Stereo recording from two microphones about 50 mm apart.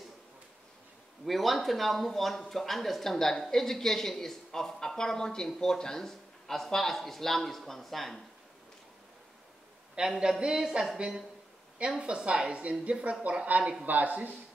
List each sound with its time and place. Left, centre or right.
1.2 s speech: centre
9.9 s speech: centre
12.0 s speech: centre